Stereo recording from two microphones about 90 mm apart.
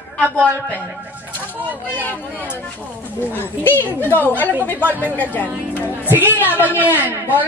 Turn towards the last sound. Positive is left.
turn(degrees=-20)  # may be behind; listen again after turning